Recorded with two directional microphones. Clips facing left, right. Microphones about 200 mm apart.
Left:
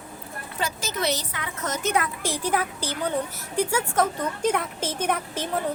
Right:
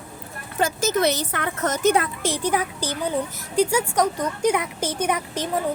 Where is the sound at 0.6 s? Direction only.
45° right (ahead or behind).